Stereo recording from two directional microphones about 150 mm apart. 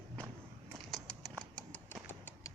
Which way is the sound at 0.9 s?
5° left (ahead or behind).